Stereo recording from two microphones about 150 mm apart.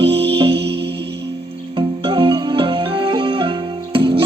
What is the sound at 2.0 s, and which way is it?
Music, 35° right (ahead or behind).